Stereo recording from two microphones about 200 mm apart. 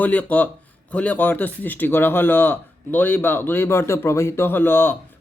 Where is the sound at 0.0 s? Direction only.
10° left (ahead or behind).